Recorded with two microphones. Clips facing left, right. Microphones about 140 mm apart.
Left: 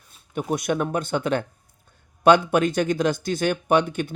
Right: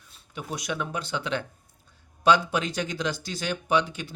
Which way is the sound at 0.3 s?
55° left (ahead or behind).